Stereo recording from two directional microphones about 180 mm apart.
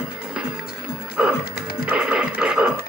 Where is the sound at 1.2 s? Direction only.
5° right (ahead or behind).